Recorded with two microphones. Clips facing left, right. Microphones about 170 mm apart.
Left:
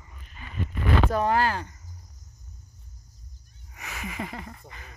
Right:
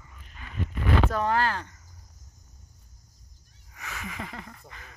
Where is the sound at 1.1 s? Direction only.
10° left (ahead or behind).